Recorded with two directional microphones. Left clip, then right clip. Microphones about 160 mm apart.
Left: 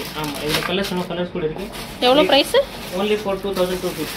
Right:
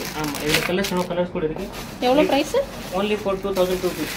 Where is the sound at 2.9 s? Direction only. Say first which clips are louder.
Left 1 dB; 15° left (ahead or behind).